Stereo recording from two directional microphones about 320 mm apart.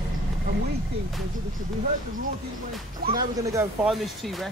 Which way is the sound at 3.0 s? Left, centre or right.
Right.